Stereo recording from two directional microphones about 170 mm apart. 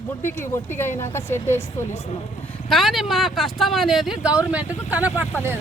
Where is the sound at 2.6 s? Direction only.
Centre (ahead or behind).